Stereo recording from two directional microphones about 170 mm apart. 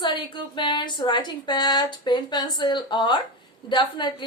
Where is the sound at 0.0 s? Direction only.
25° left (ahead or behind).